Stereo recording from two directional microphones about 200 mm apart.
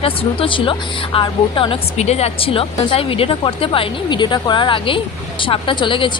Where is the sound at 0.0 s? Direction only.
25° left (ahead or behind).